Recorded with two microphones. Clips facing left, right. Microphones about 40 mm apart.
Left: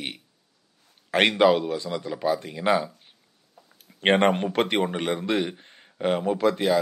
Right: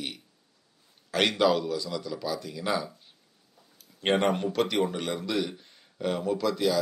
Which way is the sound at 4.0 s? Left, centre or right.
Left.